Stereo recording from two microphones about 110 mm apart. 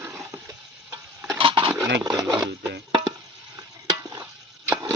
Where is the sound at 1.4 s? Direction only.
55° right (ahead or behind).